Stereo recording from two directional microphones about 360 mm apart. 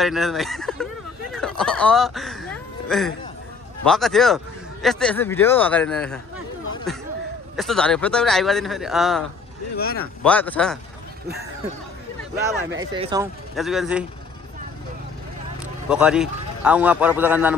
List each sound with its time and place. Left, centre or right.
0.0 s a man's voice: centre
7.5 s a man's voice: centre
9.8 s speech: left
10.2 s a man's voice: centre
12.4 s speech: centre
13.6 s a man's voice: centre
15.9 s a man's voice: centre